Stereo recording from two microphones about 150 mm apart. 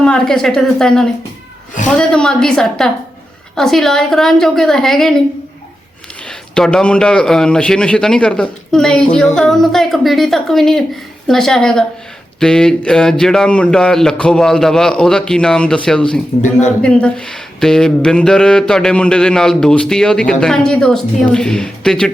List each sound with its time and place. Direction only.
0.0 s speech: 5° left (ahead or behind)
6.2 s speech: 5° left (ahead or behind)
16.4 s a man's voice: 50° left (ahead or behind)
16.8 s speech: 5° left (ahead or behind)